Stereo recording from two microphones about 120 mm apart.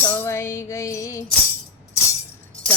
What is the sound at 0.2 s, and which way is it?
Music, 20° left (ahead or behind).